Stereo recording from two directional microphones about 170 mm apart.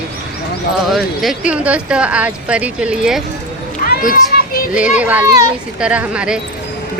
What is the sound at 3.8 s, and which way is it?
Children playing, 60° left (ahead or behind).